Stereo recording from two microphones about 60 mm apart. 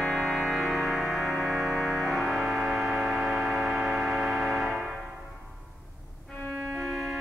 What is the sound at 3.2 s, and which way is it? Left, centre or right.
Tick-tock, right.